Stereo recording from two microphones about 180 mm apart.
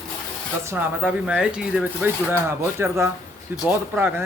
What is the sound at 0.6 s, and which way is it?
A man's voice, 10° right (ahead or behind).